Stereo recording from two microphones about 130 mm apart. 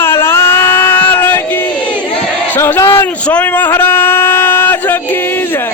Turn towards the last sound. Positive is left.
turn(degrees=15)  # may be behind; listen again after turning